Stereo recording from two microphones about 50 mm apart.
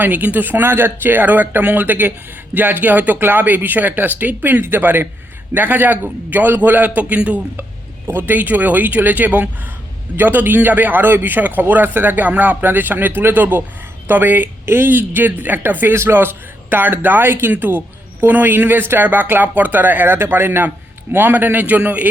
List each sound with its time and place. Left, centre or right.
0.0 s speech: right
8.0 s speech: right
8.4 s speech: right
10.2 s speech: right
20.1 s speech: right
20.7 s a man's voice: right